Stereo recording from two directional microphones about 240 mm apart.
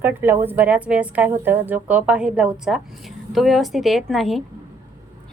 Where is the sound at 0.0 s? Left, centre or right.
Centre.